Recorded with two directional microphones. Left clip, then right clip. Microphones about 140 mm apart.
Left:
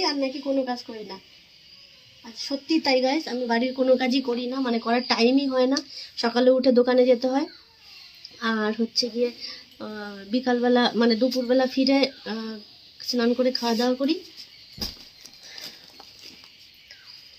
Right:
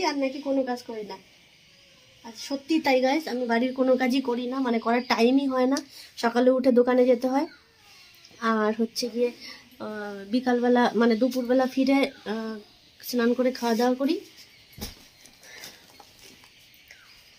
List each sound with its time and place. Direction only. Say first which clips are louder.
0.2 s speech: left 1 dB; 30° right (ahead or behind)
2.6 s a woman's voice: even; 30° right (ahead or behind)